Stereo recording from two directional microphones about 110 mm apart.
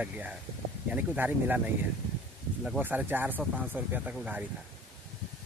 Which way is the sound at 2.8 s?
15° right (ahead or behind).